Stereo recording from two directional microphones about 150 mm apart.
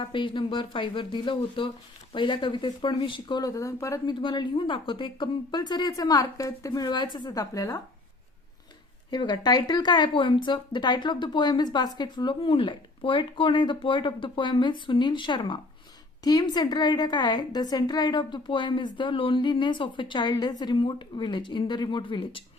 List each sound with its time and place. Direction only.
0.0 s speech: 35° left (ahead or behind)
4.2 s speech: 35° left (ahead or behind)
9.0 s speech: 30° left (ahead or behind)